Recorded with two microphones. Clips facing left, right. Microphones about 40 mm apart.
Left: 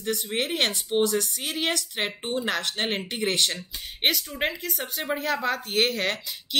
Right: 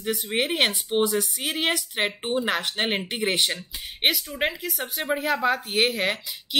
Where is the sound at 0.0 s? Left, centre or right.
Centre.